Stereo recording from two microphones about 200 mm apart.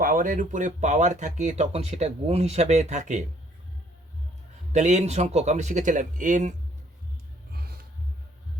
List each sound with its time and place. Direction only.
0.0 s speech: 45° right (ahead or behind)
4.7 s speech: 35° right (ahead or behind)